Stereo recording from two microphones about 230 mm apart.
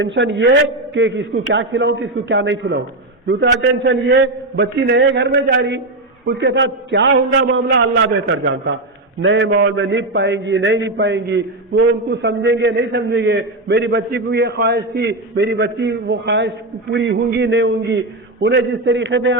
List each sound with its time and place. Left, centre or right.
0.0 s a man's voice: right